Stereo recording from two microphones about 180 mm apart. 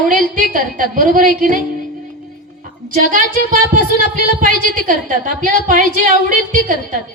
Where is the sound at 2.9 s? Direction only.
45° right (ahead or behind).